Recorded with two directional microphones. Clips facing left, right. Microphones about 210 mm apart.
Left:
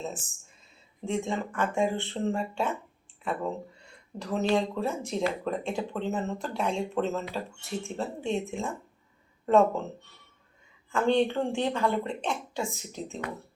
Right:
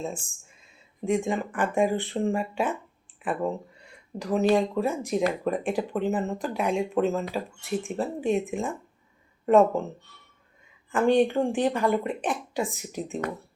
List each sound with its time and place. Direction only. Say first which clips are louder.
1.0 s speech: right 4 dB; 15° right (ahead or behind)
4.2 s speech: right 4 dB; 15° right (ahead or behind)
10.9 s speech: right 4 dB; 15° right (ahead or behind)